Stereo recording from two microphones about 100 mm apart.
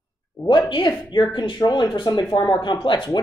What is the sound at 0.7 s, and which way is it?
A woman's voice, 50° left (ahead or behind).